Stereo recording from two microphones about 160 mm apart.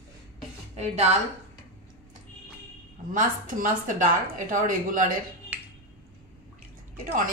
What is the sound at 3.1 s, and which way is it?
A woman's voice, 55° right (ahead or behind).